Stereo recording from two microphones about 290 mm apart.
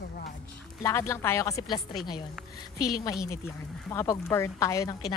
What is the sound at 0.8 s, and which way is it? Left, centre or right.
Speech, centre.